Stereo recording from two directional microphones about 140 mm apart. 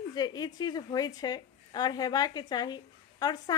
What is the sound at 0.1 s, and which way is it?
A woman's voice, 30° left (ahead or behind).